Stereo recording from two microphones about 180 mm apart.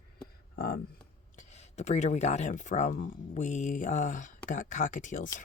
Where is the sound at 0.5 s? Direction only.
60° left (ahead or behind).